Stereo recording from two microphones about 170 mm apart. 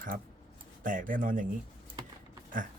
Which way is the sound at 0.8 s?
50° right (ahead or behind).